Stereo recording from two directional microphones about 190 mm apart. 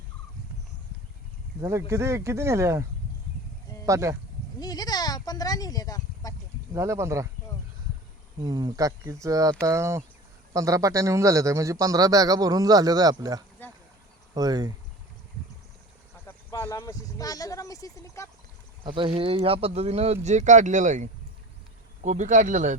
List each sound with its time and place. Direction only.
1.6 s a man's voice: 15° right (ahead or behind)
3.8 s a man's voice: 15° right (ahead or behind)
4.6 s speech: 20° left (ahead or behind)
6.7 s a man's voice: 15° right (ahead or behind)
8.4 s a man's voice: 20° right (ahead or behind)
13.6 s a sound: 10° left (ahead or behind)
14.3 s speech: 20° right (ahead or behind)
16.2 s speech: 15° left (ahead or behind)
18.8 s speech: 25° right (ahead or behind)